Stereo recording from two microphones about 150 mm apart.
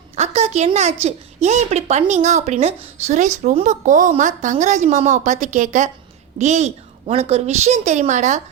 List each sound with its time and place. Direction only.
0.2 s a woman's voice: 45° right (ahead or behind)